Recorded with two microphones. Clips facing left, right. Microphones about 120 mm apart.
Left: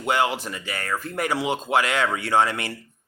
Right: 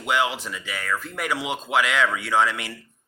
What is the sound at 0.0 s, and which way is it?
Speech, 45° left (ahead or behind).